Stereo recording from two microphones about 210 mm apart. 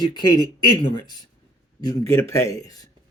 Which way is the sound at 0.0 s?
20° left (ahead or behind).